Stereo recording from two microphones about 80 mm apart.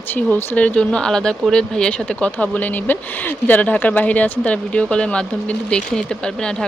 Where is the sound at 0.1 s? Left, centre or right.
Left.